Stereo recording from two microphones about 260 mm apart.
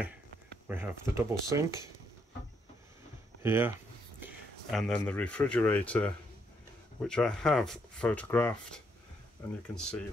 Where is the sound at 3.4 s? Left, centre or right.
Centre.